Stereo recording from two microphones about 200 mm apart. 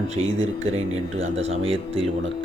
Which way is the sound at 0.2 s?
75° right (ahead or behind).